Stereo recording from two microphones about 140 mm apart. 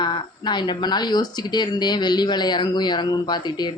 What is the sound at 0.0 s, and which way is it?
Speech, 30° left (ahead or behind).